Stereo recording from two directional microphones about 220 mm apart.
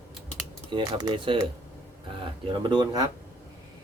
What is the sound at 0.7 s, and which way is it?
Speech, 15° right (ahead or behind).